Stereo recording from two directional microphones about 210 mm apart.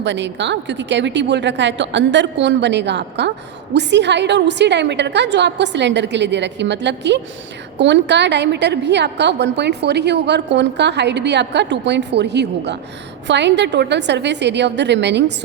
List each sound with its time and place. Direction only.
0.0 s a woman's voice: 60° right (ahead or behind)